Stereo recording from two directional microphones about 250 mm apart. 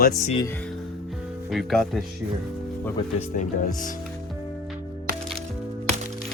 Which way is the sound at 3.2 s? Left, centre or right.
Left.